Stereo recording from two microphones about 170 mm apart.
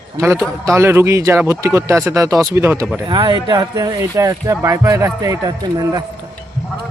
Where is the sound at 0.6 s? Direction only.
15° right (ahead or behind).